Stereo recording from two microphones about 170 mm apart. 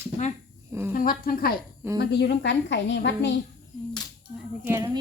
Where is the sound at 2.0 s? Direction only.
80° left.